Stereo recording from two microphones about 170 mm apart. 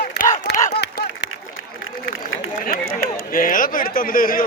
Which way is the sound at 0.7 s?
70° left (ahead or behind).